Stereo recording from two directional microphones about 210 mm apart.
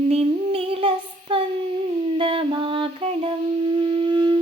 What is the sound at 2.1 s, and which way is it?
Wind instrument, 25° right (ahead or behind).